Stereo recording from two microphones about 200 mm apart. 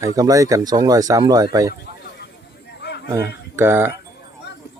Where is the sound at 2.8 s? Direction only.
55° left (ahead or behind).